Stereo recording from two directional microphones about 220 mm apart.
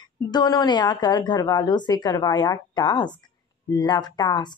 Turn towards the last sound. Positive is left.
turn(degrees=20)  # may be behind; listen again after turning